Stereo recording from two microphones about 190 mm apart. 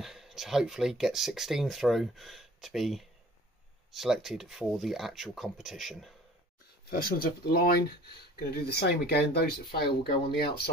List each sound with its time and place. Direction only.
0.0 s speech: centre (ahead or behind)
6.9 s speech: 50° left (ahead or behind)